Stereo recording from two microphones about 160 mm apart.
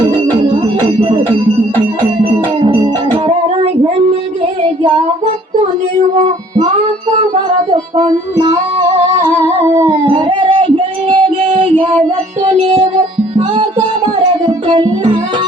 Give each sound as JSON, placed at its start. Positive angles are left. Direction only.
{"t": 2.6, "sound": "music", "side_deg": -30}
{"t": 7.7, "sound": "music", "side_deg": -30}
{"t": 9.4, "sound": "humming", "side_deg": -40}
{"t": 10.1, "sound": "a sound", "side_deg": -35}
{"t": 11.1, "sound": "music", "side_deg": -35}